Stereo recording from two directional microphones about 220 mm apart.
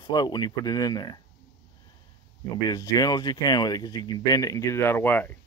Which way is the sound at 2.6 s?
15° left (ahead or behind).